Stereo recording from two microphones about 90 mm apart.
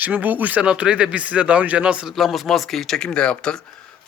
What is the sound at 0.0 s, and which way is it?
Speech, 20° right (ahead or behind).